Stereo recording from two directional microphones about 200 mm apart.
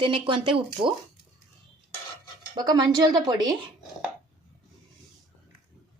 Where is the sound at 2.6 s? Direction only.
20° right (ahead or behind).